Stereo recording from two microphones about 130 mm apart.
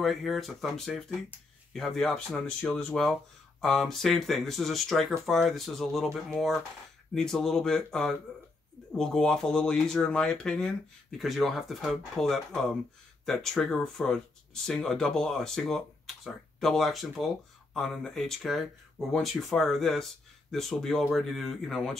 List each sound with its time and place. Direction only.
0.0 s speech: centre (ahead or behind)